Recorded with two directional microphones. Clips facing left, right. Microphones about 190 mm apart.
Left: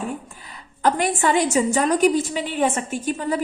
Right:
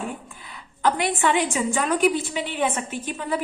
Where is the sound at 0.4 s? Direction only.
40° left (ahead or behind).